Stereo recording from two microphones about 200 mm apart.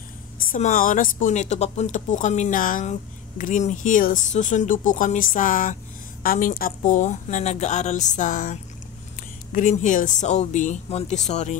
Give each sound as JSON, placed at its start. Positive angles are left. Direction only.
{"t": 0.4, "sound": "speech", "side_deg": 40}